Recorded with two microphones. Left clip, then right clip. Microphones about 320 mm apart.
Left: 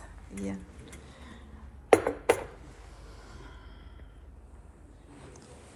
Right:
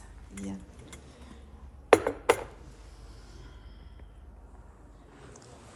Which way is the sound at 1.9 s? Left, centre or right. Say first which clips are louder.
Right 1 dB; centre.